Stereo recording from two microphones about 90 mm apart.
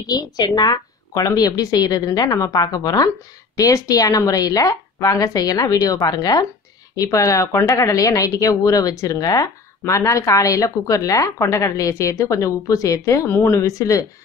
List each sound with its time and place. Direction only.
0.1 s a woman's voice: 50° left (ahead or behind)